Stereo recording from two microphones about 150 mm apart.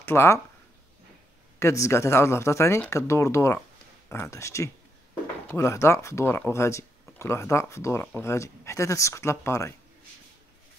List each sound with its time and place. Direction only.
0.0 s speech: 15° left (ahead or behind)
1.6 s speech: 20° left (ahead or behind)